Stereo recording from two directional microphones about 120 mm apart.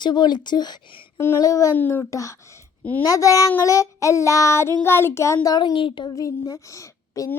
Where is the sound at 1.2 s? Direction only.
25° left (ahead or behind).